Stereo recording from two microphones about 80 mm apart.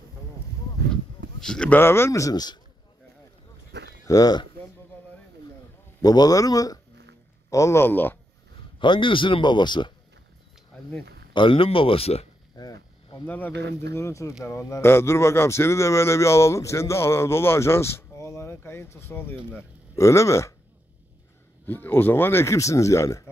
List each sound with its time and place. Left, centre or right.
1.4 s speech: centre
1.7 s speech: left
2.3 s a man's voice: left
4.0 s speech: left
6.0 s a man's voice: left
7.5 s speech: left
8.7 s speech: left
11.3 s speech: left
12.5 s a sound: left
13.2 s speech: left
13.7 s speech: left
21.6 s speech: left